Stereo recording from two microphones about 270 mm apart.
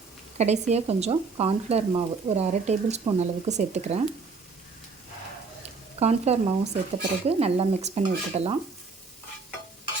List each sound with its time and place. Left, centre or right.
0.3 s speech: right
6.0 s speech: right